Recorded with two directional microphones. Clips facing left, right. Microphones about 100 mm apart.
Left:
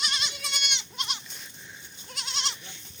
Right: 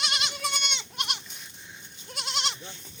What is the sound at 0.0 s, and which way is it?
Goat, 70° right (ahead or behind).